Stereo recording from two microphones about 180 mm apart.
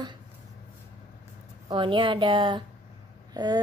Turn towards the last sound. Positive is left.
turn(degrees=-25)  # may be behind; listen again after turning